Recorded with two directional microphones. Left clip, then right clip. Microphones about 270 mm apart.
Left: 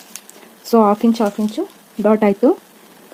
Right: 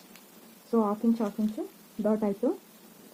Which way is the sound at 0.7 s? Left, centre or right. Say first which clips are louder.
Left 14 dB; left.